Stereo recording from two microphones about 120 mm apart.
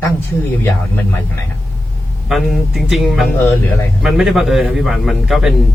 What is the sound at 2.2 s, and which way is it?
A man's voice, 5° right (ahead or behind).